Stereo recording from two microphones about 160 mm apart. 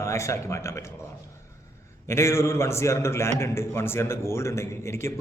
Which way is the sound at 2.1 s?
15° left (ahead or behind).